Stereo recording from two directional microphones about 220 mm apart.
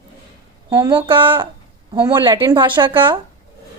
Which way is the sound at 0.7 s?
20° right (ahead or behind).